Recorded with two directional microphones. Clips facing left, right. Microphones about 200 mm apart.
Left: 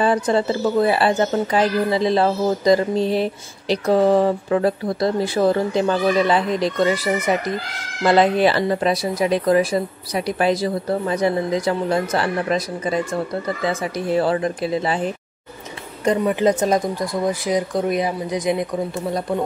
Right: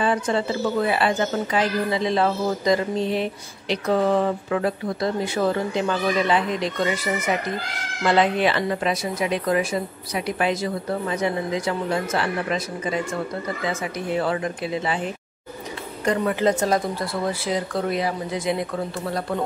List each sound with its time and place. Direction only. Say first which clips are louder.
0.0 s a woman's voice: left 4 dB; 40° left (ahead or behind)
16.1 s speech: left 3 dB; 20° left (ahead or behind)